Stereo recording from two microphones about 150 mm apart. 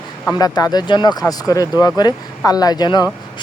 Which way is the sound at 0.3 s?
25° left (ahead or behind).